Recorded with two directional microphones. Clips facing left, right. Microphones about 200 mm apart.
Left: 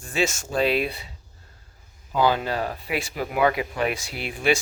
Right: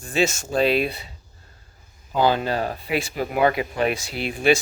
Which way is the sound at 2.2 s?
30° right (ahead or behind).